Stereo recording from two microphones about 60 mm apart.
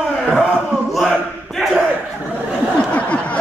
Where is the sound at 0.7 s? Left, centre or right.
Centre.